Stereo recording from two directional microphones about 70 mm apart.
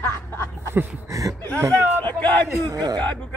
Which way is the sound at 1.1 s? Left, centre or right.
Right.